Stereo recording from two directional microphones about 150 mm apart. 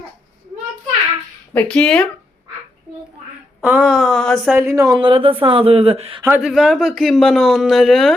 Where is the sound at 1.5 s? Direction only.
5° left (ahead or behind).